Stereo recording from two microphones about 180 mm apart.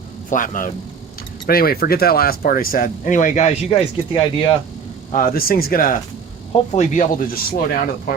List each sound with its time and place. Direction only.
0.3 s a man's voice: 50° left (ahead or behind)
3.7 s speech: 25° left (ahead or behind)
5.1 s speech: 55° left (ahead or behind)
6.5 s speech: 35° left (ahead or behind); by 7.6 s 50° left (ahead or behind)